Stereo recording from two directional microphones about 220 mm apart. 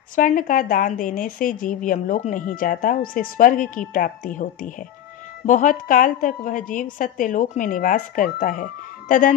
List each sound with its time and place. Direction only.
0.1 s a woman's voice: 40° left (ahead or behind)